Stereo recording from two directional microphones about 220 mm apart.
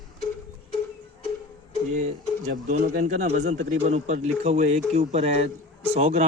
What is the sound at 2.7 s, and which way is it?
Speech, 35° right (ahead or behind).